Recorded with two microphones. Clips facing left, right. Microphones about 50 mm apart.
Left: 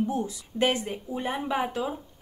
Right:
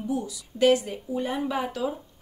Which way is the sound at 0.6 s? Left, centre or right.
Left.